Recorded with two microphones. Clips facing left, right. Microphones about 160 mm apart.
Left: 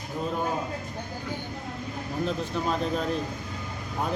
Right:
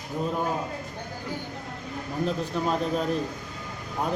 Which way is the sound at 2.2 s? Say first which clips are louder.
Right 2 dB; 5° right (ahead or behind).